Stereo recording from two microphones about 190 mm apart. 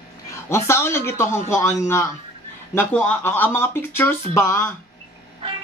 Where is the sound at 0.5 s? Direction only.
15° left (ahead or behind).